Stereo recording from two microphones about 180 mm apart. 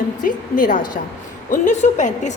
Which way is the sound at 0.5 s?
50° left (ahead or behind).